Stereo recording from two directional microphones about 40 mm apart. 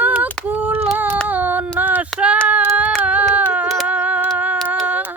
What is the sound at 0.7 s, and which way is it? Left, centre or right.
Singing, right.